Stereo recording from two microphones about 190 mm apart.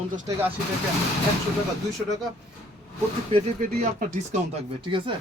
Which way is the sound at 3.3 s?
30° right (ahead or behind).